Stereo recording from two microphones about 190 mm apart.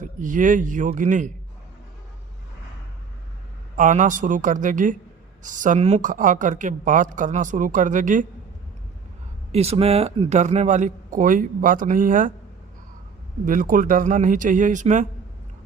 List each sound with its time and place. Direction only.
0.0 s speech: 40° right (ahead or behind)
3.8 s speech: 40° right (ahead or behind)
9.5 s a man's voice: 30° right (ahead or behind)
13.4 s speech: 45° right (ahead or behind)